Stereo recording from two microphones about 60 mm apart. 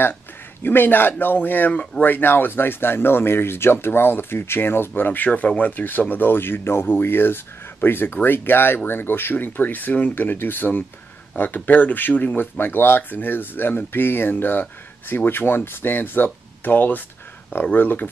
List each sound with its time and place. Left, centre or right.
0.6 s speech: left
1.7 s speech: centre
2.0 s speech: left